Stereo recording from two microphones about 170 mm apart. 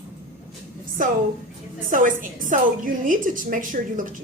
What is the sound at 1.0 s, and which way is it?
A woman's voice, 50° right (ahead or behind).